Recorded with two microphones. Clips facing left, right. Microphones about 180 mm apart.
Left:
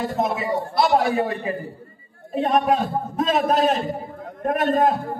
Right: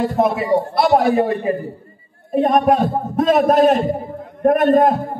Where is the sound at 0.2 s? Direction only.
55° right (ahead or behind).